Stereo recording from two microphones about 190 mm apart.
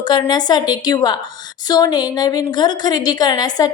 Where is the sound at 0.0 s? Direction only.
25° left (ahead or behind).